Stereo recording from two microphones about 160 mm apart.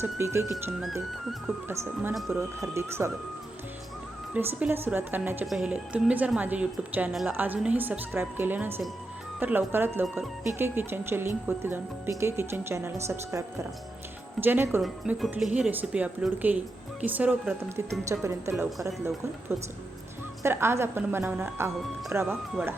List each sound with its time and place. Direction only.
0.0 s speech: 15° right (ahead or behind)
1.6 s speech: 15° right (ahead or behind)
2.1 s speech: centre (ahead or behind)
2.6 s speech: 15° right (ahead or behind)
4.4 s speech: 15° right (ahead or behind)
14.4 s speech: 15° right (ahead or behind)
14.8 s speech: centre (ahead or behind)
18.1 s speech: 20° right (ahead or behind)